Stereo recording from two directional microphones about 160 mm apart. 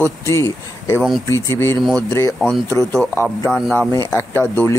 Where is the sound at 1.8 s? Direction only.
Centre (ahead or behind).